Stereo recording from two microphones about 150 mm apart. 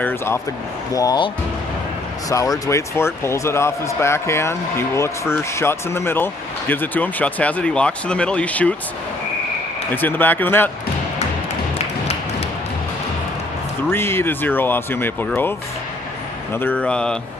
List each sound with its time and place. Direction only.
0.0 s speech: 10° left (ahead or behind)
0.9 s speech: 25° left (ahead or behind)
2.3 s speech: 20° left (ahead or behind)
9.9 s speech: 15° left (ahead or behind)
13.9 s speech: 15° left (ahead or behind)
16.6 s speech: 10° left (ahead or behind)